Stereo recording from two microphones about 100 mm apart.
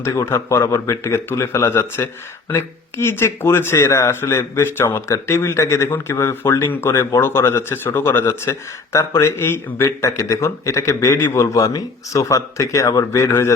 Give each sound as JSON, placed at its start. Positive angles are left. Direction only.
{"t": 0.0, "sound": "speech", "side_deg": 30}